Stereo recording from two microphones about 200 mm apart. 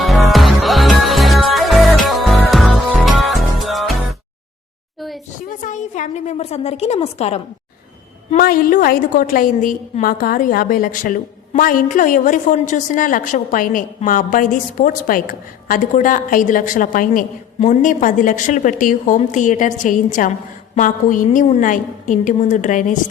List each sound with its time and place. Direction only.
0.0 s music: centre (ahead or behind)
4.9 s a sound: centre (ahead or behind)
5.5 s a woman's voice: 40° left (ahead or behind)
8.4 s a woman's voice: 45° left (ahead or behind)